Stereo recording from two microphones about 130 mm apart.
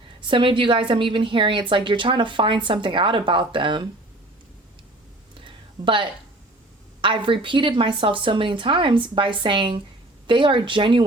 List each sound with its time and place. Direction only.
0.3 s a woman's voice: 40° right (ahead or behind)
5.8 s a woman's voice: 40° right (ahead or behind)